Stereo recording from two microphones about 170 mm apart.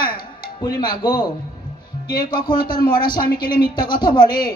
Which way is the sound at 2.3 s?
25° left (ahead or behind).